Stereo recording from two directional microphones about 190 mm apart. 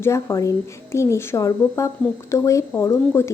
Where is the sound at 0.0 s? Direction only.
15° left (ahead or behind).